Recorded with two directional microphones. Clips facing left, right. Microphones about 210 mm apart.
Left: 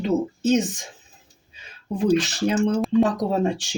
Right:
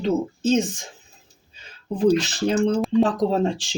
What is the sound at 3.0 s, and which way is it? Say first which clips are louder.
Speech: right 2 dB; 10° left (ahead or behind).